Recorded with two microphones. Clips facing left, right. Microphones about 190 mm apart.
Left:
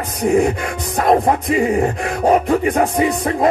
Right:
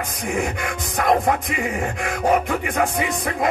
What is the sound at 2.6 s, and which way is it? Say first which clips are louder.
Music: left 6 dB; 35° left (ahead or behind).